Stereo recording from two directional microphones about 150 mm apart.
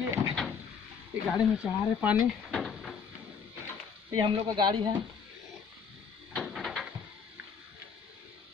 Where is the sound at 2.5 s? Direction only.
5° left (ahead or behind).